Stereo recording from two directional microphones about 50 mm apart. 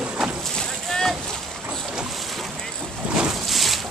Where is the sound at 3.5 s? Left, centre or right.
Centre.